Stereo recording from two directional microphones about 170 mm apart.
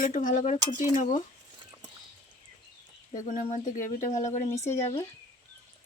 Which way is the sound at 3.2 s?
50° left (ahead or behind).